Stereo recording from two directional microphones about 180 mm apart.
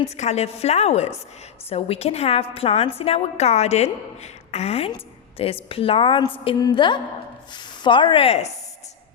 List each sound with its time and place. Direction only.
0.0 s a woman's voice: 35° left (ahead or behind)